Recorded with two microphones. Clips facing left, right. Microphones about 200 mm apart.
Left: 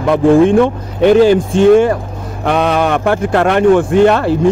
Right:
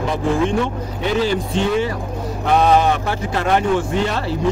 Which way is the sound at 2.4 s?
65° left (ahead or behind).